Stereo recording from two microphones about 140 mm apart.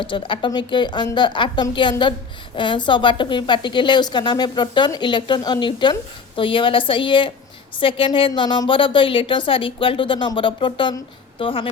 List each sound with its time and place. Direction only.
0.0 s a woman's voice: 35° left (ahead or behind)